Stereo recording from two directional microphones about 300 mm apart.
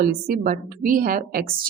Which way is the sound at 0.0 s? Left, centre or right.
Right.